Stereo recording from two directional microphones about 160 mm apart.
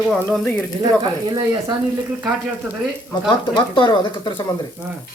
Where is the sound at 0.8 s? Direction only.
25° right (ahead or behind).